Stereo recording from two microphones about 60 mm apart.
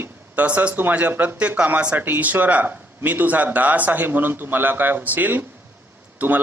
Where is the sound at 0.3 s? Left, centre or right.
Right.